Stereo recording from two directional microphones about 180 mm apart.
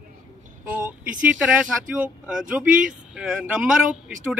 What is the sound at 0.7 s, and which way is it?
Vehicle, 10° right (ahead or behind).